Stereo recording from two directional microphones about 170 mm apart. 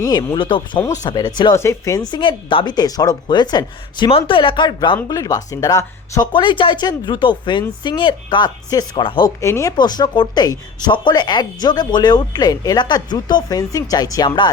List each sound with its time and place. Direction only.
0.0 s speech: 20° left (ahead or behind)